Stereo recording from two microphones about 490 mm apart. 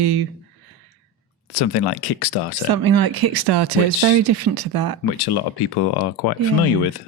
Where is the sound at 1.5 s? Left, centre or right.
Left.